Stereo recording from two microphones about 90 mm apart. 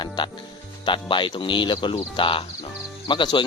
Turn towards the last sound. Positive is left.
turn(degrees=60)  # may be behind; listen again after turning